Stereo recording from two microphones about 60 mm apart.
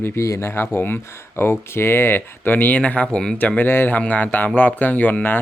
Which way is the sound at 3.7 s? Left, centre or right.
Left.